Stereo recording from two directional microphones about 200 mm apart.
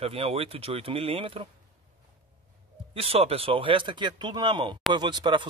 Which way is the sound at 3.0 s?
30° right (ahead or behind).